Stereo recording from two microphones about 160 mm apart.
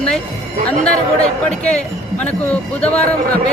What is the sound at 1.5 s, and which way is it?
A man's voice, 5° left (ahead or behind).